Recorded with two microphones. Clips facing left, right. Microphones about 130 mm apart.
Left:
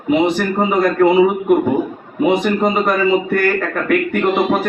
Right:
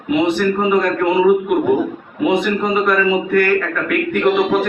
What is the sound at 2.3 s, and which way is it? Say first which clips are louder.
A man's voice: left 1 dB; 40° left (ahead or behind).